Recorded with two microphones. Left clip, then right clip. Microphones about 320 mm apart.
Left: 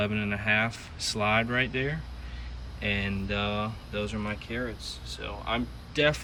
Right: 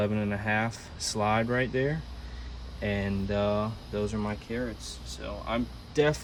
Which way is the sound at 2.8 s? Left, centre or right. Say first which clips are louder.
Left 2 dB; right.